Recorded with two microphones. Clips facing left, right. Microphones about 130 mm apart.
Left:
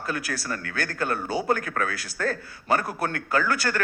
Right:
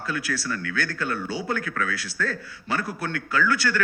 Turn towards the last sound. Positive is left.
turn(degrees=40)  # may be behind; listen again after turning